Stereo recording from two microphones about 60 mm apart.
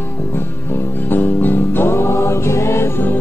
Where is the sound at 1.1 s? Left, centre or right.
Left.